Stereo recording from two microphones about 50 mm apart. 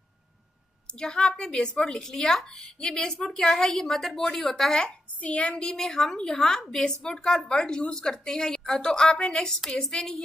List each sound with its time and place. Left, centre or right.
0.9 s a woman's voice: centre
1.8 s a woman's voice: centre
5.2 s a woman's voice: left
5.6 s a woman's voice: centre